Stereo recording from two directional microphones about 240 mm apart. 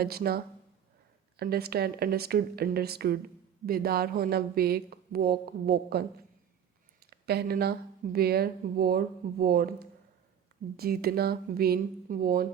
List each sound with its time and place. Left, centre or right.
0.0 s speech: right
7.1 s speech: right